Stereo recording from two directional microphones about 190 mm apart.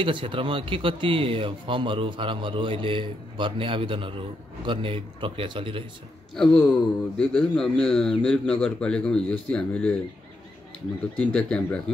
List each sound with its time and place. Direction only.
0.0 s speech: 25° right (ahead or behind)
6.3 s a man's voice: centre (ahead or behind)
11.1 s speech: 10° left (ahead or behind)